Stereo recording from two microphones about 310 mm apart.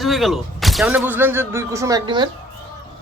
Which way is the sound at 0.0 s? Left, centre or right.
Centre.